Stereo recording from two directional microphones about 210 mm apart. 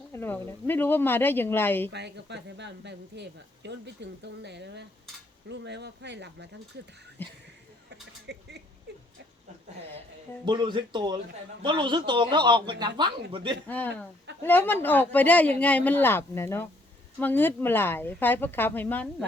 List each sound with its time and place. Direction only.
0.1 s speech: 10° left (ahead or behind)
1.9 s speech: 55° right (ahead or behind)
7.2 s speech: 10° left (ahead or behind)
8.3 s speech: 55° right (ahead or behind)
8.9 s a sound: 55° right (ahead or behind)
10.4 s a man's voice: 20° right (ahead or behind)
13.7 s speech: 10° left (ahead or behind)